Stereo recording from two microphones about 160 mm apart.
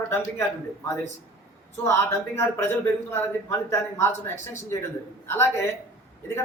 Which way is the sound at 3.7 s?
15° left (ahead or behind).